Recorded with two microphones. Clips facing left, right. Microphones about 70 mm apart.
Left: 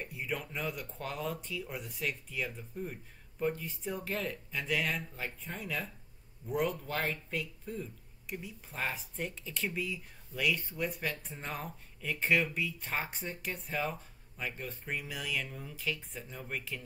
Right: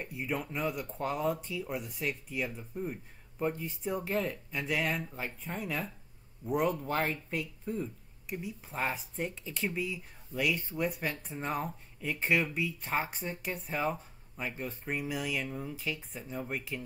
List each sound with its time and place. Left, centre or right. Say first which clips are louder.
0.0 s speech: right 3 dB; centre; by 7.9 s right
8.3 s speech: right 4 dB; centre